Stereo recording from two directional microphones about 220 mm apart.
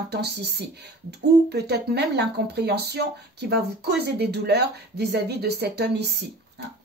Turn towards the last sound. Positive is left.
turn(degrees=-50)  # may be behind; listen again after turning